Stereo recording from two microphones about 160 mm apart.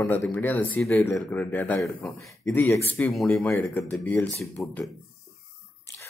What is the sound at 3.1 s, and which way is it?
Speech, centre (ahead or behind).